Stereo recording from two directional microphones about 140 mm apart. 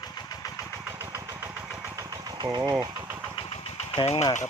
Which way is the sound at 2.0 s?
30° right (ahead or behind).